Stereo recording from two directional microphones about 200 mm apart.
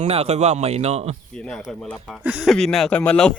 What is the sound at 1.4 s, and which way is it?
Speech, 5° left (ahead or behind).